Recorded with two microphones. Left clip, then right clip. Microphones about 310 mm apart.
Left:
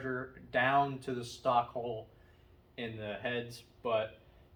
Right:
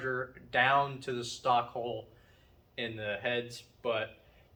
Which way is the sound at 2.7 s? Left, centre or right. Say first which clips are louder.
Right 4 dB; centre.